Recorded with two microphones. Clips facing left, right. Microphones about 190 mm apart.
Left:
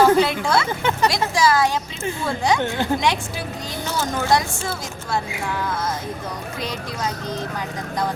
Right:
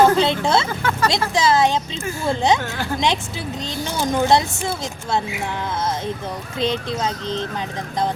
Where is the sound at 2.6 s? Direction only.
20° left (ahead or behind).